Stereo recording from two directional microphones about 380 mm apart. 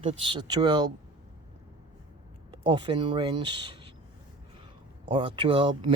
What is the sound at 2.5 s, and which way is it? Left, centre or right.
Speech, centre.